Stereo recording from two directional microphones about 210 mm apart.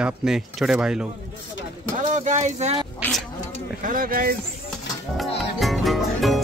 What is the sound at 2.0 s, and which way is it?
Speech, 35° right (ahead or behind).